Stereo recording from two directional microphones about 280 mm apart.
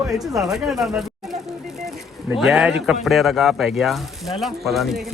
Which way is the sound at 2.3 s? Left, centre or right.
Centre.